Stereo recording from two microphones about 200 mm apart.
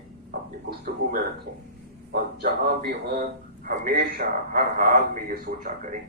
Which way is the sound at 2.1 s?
50° right (ahead or behind).